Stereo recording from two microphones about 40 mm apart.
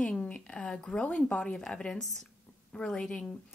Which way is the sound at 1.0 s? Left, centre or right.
Left.